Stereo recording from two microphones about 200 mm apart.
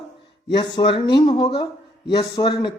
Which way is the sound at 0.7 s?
25° left (ahead or behind).